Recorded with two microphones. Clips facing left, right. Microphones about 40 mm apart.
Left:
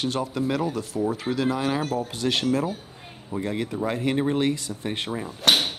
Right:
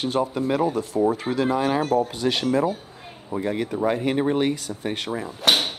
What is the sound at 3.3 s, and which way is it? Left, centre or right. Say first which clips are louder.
Speech: right 3 dB; centre.